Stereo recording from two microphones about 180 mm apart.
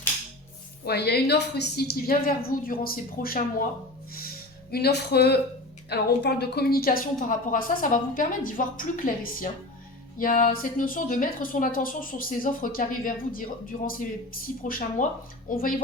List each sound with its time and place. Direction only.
0.9 s a woman's voice: 65° left (ahead or behind)
4.7 s a woman's voice: 65° left (ahead or behind)
14.6 s a woman's voice: 50° left (ahead or behind)